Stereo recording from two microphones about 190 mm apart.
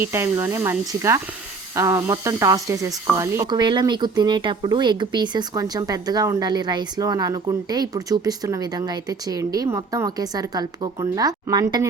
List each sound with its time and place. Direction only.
0.0 s speech: 15° right (ahead or behind)